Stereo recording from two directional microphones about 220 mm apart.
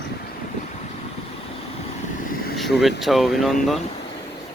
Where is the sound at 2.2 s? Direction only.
40° left (ahead or behind).